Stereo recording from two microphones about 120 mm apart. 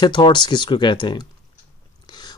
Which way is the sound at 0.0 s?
40° left (ahead or behind).